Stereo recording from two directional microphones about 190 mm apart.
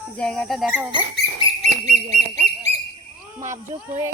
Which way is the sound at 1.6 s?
35° right (ahead or behind).